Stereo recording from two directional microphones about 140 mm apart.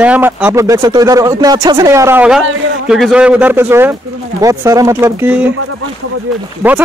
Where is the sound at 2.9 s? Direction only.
5° right (ahead or behind); by 5.3 s 20° right (ahead or behind).